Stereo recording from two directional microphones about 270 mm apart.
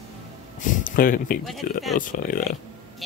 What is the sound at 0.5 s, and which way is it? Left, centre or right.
Speech, left.